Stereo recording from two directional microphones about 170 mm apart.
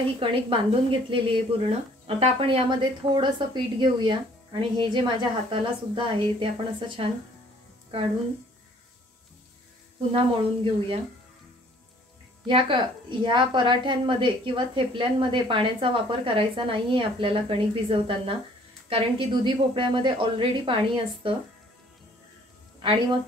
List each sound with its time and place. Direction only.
0.2 s speech: 30° right (ahead or behind)
10.1 s speech: 30° right (ahead or behind)
12.4 s speech: 30° right (ahead or behind)
22.8 s a woman's voice: 30° right (ahead or behind)